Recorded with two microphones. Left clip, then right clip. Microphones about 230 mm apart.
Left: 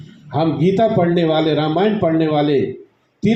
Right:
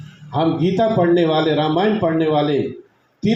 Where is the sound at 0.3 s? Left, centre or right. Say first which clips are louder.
Left 1 dB; left.